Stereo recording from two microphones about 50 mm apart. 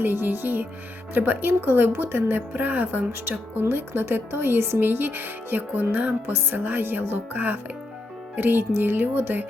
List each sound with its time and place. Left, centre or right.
0.0 s music: right
1.1 s speech: right